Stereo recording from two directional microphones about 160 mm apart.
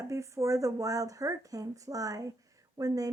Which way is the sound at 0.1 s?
20° right (ahead or behind).